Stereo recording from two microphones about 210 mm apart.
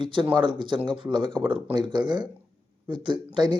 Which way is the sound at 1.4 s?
5° right (ahead or behind).